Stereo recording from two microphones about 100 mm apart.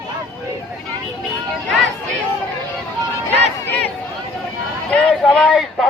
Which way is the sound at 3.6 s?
15° left (ahead or behind).